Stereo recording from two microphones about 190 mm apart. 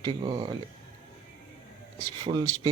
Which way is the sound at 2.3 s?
20° right (ahead or behind).